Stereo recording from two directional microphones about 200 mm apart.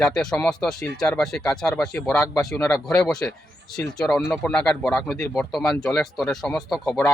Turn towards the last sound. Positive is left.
turn(degrees=5)  # may be behind; listen again after turning